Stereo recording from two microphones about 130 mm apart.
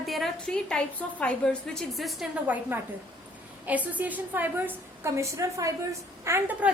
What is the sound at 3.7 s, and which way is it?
A woman's voice, 10° right (ahead or behind).